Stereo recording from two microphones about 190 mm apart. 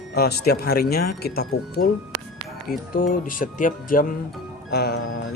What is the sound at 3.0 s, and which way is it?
Speech, 45° left (ahead or behind).